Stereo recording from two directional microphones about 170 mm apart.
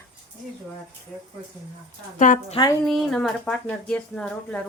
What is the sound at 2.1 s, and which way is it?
Speech, 50° left (ahead or behind).